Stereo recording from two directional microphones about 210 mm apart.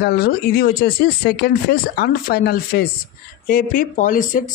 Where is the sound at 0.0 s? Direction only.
50° left (ahead or behind).